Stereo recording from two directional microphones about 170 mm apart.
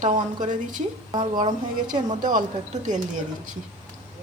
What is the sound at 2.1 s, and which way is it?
Speech, 50° right (ahead or behind).